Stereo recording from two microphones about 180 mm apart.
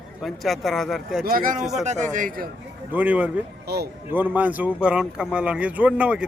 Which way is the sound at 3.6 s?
65° right (ahead or behind).